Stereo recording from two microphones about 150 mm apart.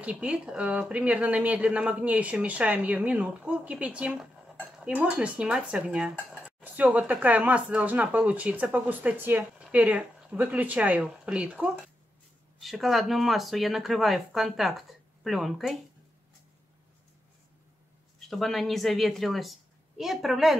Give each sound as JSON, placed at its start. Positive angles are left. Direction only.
{"t": 0.0, "sound": "speech", "side_deg": -10}
{"t": 18.3, "sound": "speech", "side_deg": 0}